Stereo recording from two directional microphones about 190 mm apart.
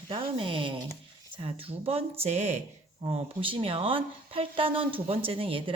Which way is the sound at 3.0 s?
25° right (ahead or behind).